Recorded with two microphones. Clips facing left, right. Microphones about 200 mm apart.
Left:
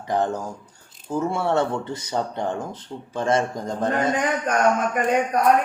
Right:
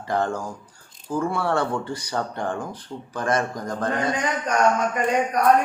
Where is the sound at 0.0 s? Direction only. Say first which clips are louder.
Left 1 dB; 20° left (ahead or behind).